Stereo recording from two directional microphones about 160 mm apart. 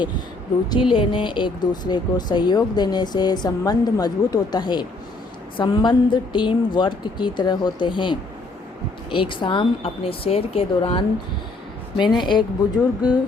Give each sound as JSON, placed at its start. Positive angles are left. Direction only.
{"t": 0.7, "sound": "speech", "side_deg": 30}